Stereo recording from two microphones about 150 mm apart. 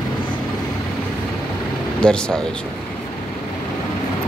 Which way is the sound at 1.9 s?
5° left (ahead or behind).